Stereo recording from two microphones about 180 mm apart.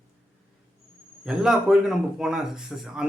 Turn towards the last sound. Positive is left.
turn(degrees=0)  # may be behind; listen again after turning